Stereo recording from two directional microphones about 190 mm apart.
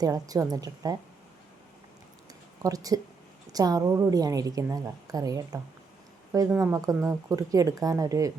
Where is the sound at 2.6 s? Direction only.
20° right (ahead or behind).